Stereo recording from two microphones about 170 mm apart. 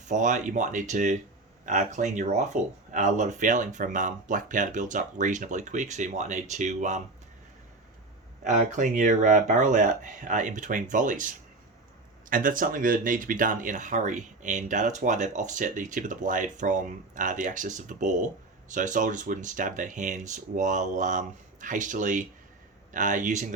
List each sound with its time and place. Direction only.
0.0 s speech: 45° right (ahead or behind)
8.4 s speech: 45° right (ahead or behind)